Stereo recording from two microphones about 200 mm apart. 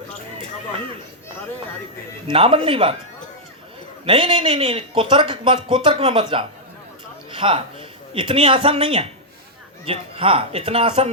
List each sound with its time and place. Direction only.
2.2 s speech: 25° right (ahead or behind)
4.0 s speech: 25° right (ahead or behind)